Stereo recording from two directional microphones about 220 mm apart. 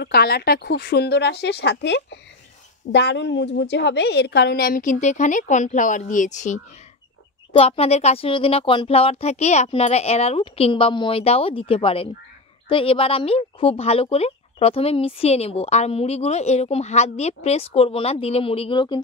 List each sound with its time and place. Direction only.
0.0 s a woman's voice: 45° left (ahead or behind); by 18.9 s 20° left (ahead or behind)